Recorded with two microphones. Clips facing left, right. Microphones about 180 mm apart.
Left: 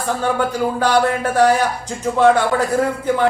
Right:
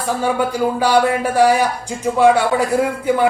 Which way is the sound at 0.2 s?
10° right (ahead or behind).